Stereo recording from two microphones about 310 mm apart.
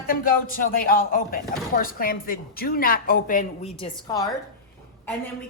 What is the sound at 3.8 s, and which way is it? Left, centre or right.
Speech, centre.